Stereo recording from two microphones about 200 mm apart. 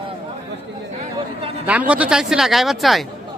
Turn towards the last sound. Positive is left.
turn(degrees=0)  # may be behind; listen again after turning